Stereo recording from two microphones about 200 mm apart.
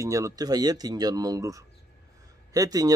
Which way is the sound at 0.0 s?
15° right (ahead or behind).